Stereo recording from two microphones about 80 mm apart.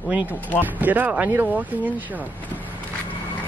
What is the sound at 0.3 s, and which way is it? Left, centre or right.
Speech, left.